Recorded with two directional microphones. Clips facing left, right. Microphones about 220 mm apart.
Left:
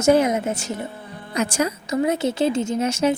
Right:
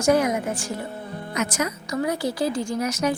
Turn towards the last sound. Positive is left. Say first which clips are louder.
# left 4 dB
turn(degrees=25)  # may be behind; listen again after turning